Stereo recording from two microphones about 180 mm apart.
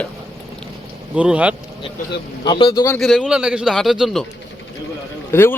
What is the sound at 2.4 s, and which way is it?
Speech, 25° left (ahead or behind).